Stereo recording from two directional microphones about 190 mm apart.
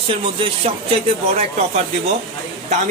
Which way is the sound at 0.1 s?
30° right (ahead or behind).